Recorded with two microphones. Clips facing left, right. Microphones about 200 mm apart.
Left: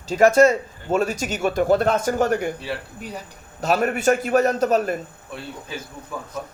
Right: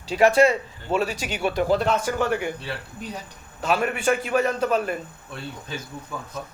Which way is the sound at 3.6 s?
40° left (ahead or behind).